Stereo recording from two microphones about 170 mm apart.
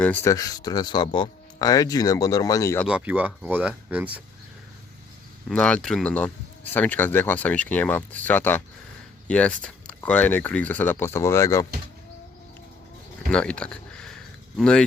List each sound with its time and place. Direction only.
0.0 s speech: 10° left (ahead or behind)
2.8 s speech: 10° right (ahead or behind)
5.5 s speech: 5° left (ahead or behind)
13.3 s a sound: 5° left (ahead or behind)